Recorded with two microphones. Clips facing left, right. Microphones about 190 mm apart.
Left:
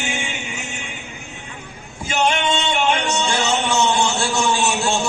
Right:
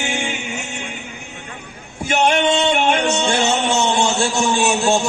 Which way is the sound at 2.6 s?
50° right (ahead or behind).